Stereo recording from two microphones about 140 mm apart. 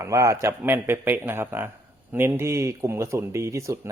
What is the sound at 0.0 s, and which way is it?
Speech, 20° right (ahead or behind).